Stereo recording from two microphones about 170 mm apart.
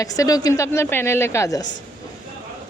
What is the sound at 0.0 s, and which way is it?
Speech, 20° left (ahead or behind).